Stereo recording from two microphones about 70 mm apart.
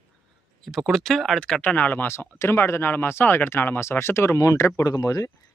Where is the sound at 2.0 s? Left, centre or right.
Left.